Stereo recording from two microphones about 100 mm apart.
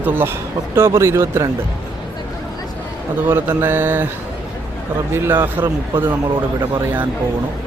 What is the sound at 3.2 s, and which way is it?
Speech, 20° right (ahead or behind).